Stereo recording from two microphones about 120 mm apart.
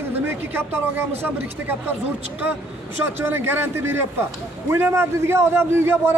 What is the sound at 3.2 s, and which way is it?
A man's voice, 20° right (ahead or behind).